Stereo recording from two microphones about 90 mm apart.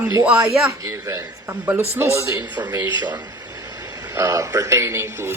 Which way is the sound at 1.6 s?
25° right (ahead or behind).